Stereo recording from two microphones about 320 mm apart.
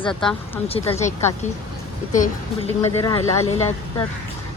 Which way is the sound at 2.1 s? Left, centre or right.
Left.